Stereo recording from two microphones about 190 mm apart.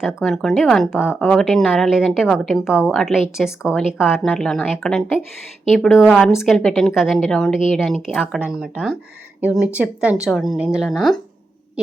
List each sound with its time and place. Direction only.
0.0 s speech: centre (ahead or behind)